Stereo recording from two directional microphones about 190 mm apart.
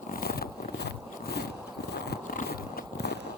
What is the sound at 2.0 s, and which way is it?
Biting, 50° left (ahead or behind).